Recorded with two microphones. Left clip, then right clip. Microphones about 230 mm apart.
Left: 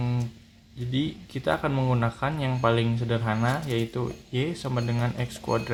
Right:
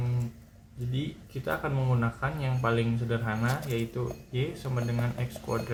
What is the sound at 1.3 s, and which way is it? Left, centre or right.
Speech, left.